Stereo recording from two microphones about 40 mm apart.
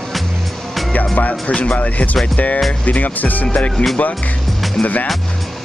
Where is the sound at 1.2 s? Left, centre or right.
Left.